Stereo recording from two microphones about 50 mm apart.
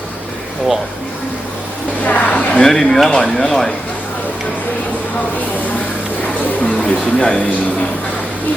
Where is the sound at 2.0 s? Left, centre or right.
Left.